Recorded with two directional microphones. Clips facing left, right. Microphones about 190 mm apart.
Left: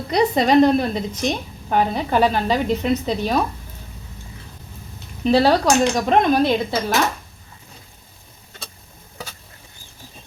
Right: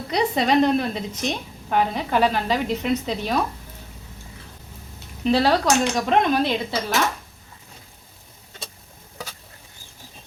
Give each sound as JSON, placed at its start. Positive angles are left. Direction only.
{"t": 0.1, "sound": "a woman's voice", "side_deg": 40}
{"t": 5.2, "sound": "a woman's voice", "side_deg": 35}